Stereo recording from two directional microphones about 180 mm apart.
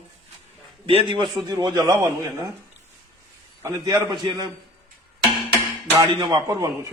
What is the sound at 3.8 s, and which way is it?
Speech, 25° right (ahead or behind).